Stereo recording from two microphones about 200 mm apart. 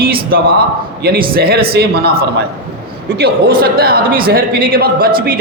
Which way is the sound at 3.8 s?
50° right (ahead or behind).